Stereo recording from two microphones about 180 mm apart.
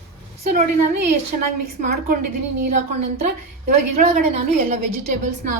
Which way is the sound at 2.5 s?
40° right (ahead or behind).